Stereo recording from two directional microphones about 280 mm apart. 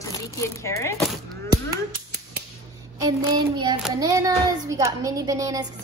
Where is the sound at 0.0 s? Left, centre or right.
Centre.